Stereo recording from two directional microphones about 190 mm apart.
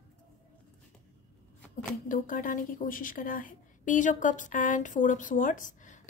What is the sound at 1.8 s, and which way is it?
A woman's voice, 45° left (ahead or behind).